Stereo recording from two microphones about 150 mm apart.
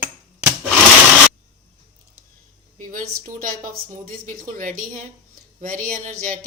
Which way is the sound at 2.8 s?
60° right (ahead or behind).